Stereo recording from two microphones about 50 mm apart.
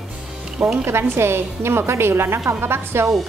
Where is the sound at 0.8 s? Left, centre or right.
Right.